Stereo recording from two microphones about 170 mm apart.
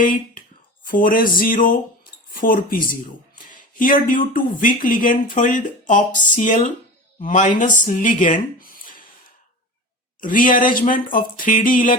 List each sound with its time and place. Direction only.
0.0 s speech: 55° left (ahead or behind)
10.2 s speech: 55° left (ahead or behind)